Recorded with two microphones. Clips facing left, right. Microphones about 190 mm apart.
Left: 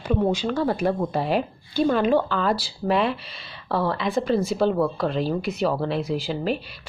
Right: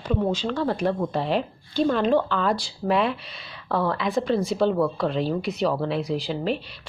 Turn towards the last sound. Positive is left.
turn(degrees=5)  # may be behind; listen again after turning